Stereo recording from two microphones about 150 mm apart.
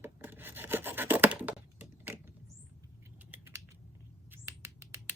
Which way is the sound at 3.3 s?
15° right (ahead or behind).